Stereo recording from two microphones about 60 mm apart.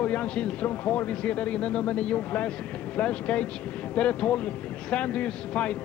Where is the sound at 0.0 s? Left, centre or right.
Left.